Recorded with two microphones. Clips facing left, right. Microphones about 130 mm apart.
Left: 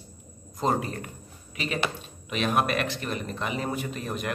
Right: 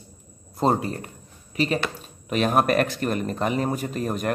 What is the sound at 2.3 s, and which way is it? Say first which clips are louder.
A man's voice: right 5 dB; 40° right (ahead or behind).